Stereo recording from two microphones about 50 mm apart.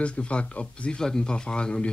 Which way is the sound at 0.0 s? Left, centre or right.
Left.